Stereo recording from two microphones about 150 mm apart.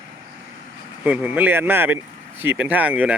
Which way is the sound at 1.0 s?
10° right (ahead or behind).